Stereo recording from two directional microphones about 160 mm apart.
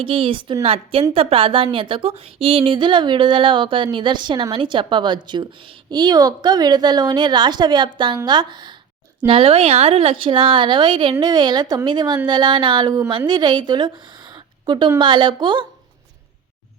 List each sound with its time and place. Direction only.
0.0 s a woman's voice: 35° right (ahead or behind)